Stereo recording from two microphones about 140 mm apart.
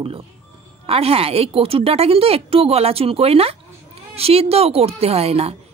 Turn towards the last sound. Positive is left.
turn(degrees=-45)  # may be behind; listen again after turning